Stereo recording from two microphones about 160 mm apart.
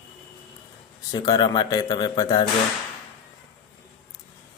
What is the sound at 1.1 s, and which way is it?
Speech, 25° left (ahead or behind).